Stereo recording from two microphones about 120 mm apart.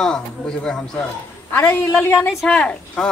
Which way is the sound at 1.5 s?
15° left (ahead or behind).